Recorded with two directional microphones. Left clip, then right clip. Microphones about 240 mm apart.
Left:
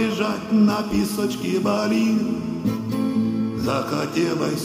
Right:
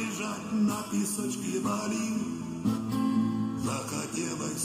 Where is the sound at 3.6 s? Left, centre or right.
Left.